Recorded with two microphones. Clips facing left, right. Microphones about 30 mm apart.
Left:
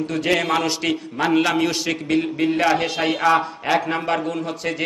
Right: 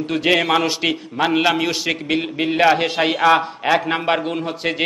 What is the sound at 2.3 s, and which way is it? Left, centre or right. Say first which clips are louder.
A man's voice: right 6 dB; right.